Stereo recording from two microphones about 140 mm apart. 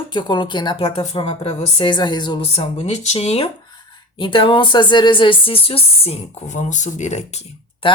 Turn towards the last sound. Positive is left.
turn(degrees=40)  # may be behind; listen again after turning